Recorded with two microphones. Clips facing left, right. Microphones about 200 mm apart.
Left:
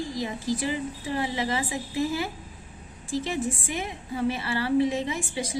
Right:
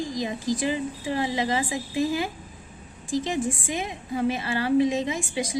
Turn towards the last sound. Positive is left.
turn(degrees=-15)  # may be behind; listen again after turning